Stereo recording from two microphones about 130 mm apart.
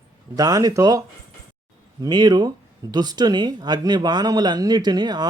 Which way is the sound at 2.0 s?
30° right (ahead or behind).